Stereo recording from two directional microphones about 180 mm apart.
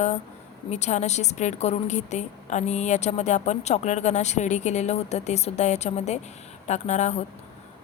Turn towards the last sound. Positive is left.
turn(degrees=40)  # may be behind; listen again after turning